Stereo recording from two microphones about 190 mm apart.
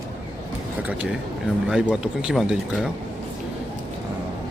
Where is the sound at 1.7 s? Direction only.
5° right (ahead or behind).